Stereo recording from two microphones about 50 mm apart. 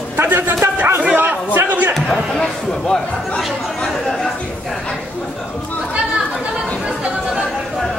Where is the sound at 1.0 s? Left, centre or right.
Right.